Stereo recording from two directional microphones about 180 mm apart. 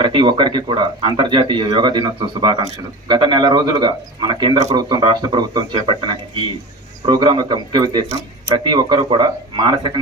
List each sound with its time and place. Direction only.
0.0 s speech: 25° right (ahead or behind)